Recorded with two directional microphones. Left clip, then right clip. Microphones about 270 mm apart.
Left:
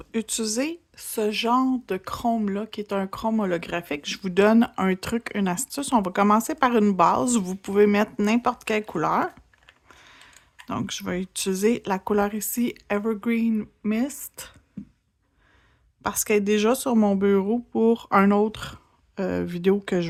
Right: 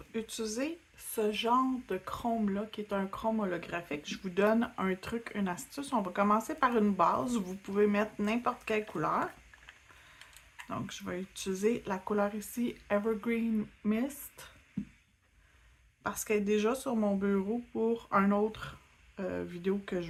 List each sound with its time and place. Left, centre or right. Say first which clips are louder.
0.1 s speech: left 9 dB; left
10.7 s speech: left 10 dB; left
16.0 s speech: left 9 dB; left